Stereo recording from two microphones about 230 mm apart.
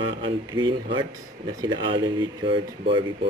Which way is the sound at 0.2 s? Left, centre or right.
Centre.